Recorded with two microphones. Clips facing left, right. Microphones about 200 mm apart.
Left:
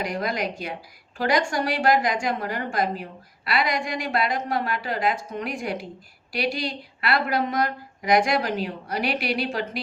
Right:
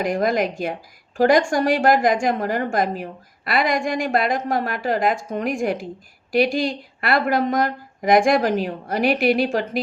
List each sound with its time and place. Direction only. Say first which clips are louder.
0.0 s speech: right 7 dB; 50° right (ahead or behind)